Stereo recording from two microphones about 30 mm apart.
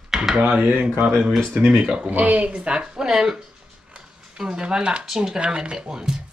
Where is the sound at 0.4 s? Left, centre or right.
Right.